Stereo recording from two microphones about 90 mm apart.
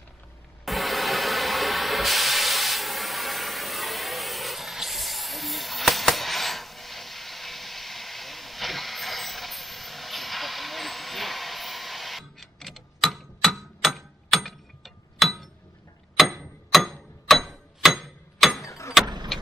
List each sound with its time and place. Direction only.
0.7 s steam: centre (ahead or behind)
16.2 s clock: centre (ahead or behind)
18.6 s vehicle: 35° left (ahead or behind)